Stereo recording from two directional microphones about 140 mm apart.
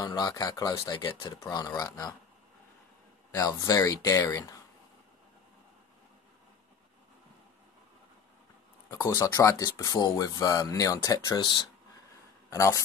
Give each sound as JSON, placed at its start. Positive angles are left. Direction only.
{"t": 0.0, "sound": "speech", "side_deg": 30}
{"t": 3.3, "sound": "speech", "side_deg": 25}
{"t": 9.0, "sound": "speech", "side_deg": 20}